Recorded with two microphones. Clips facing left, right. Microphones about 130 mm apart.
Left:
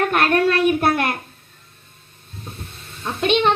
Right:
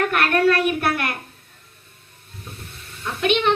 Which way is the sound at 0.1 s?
30° left (ahead or behind).